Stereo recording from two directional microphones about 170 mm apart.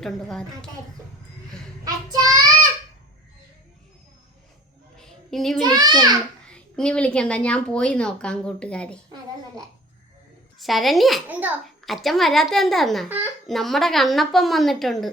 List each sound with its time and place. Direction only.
0.0 s a woman's voice: centre (ahead or behind)
1.8 s child singing: 25° right (ahead or behind)
4.9 s a sound: centre (ahead or behind)
5.6 s a child's voice: 25° right (ahead or behind)
6.5 s a woman's voice: 5° left (ahead or behind)
10.6 s a woman's voice: centre (ahead or behind)
11.3 s a child's voice: 10° right (ahead or behind)
11.6 s a woman's voice: centre (ahead or behind)